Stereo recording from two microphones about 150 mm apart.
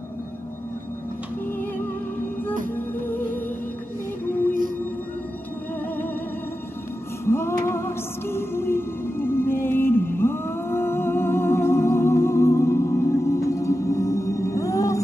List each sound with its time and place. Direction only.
7.2 s music: 15° left (ahead or behind)